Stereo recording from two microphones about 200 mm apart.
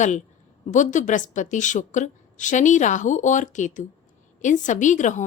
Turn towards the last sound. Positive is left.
turn(degrees=40)  # may be behind; listen again after turning